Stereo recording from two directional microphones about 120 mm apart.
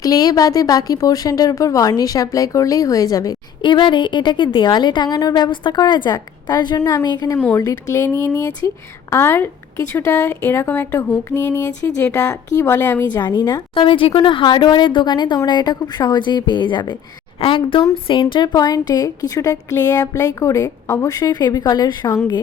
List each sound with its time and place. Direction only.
0.0 s speech: 30° left (ahead or behind)
3.6 s a woman's voice: 40° left (ahead or behind); by 13.1 s 20° left (ahead or behind)
13.1 s a woman's voice: 35° left (ahead or behind)